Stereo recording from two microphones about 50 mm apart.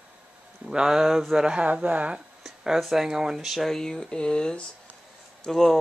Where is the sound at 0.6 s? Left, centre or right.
Centre.